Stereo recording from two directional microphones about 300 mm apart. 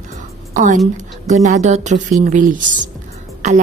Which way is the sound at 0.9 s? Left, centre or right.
Right.